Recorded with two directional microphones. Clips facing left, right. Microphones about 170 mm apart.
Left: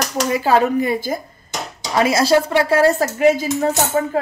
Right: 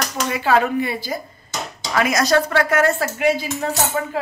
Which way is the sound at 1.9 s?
30° left (ahead or behind).